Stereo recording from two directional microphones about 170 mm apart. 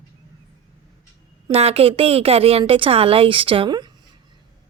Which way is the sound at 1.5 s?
35° right (ahead or behind).